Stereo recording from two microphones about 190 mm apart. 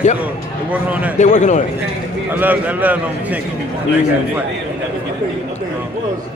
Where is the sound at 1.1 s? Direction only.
40° left (ahead or behind).